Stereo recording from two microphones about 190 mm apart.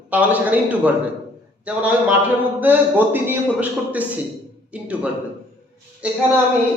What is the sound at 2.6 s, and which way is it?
A man's voice, 10° right (ahead or behind).